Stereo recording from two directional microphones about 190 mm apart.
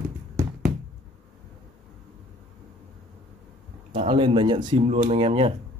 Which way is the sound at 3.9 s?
25° right (ahead or behind).